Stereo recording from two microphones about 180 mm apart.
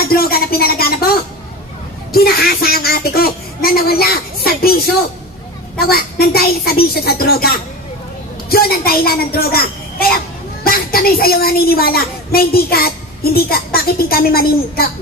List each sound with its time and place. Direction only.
0.0 s a sound: 55° left (ahead or behind)
2.1 s a woman's voice: 60° left (ahead or behind)
4.5 s music: 55° left (ahead or behind)
5.9 s a woman's voice: 60° left (ahead or behind)